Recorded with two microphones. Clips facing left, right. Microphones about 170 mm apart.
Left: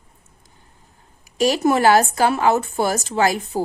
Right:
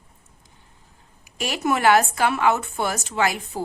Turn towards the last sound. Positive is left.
turn(degrees=35)  # may be behind; listen again after turning